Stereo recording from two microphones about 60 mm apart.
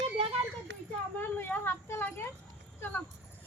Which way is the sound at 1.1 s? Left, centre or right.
Left.